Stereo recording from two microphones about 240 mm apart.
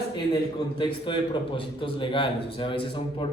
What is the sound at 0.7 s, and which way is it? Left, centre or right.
A man's voice, centre.